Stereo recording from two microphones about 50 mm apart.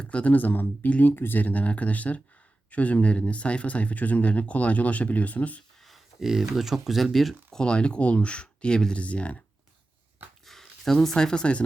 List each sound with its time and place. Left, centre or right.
0.0 s speech: left
0.3 s speech: left
1.1 s speech: left
1.4 s speech: left
5.8 s speech: centre
7.5 s speech: centre
10.4 s speech: centre